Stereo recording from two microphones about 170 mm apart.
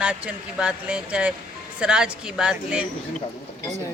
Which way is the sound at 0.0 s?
10° right (ahead or behind).